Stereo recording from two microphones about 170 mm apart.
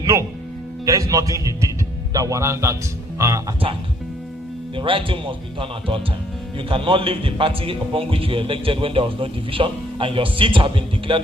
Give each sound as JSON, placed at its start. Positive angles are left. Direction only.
{"t": 0.0, "sound": "speech", "side_deg": -20}
{"t": 4.8, "sound": "a man's voice", "side_deg": -30}